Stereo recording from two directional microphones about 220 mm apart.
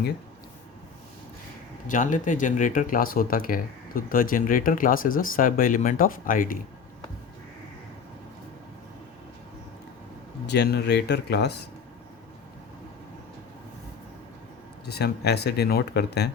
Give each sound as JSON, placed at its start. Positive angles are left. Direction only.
{"t": 1.9, "sound": "speech", "side_deg": 35}
{"t": 10.4, "sound": "speech", "side_deg": 50}
{"t": 14.8, "sound": "speech", "side_deg": 45}